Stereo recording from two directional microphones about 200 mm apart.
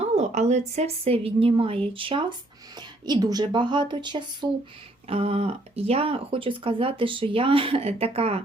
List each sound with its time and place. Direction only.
0.0 s speech: 35° right (ahead or behind)